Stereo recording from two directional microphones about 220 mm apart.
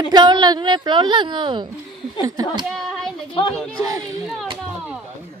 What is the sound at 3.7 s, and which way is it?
Speech, 15° right (ahead or behind).